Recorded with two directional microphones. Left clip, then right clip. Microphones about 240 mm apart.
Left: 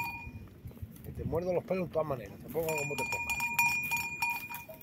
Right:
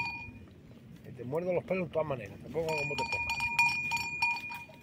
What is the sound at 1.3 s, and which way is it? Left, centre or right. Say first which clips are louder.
Speech: even; centre.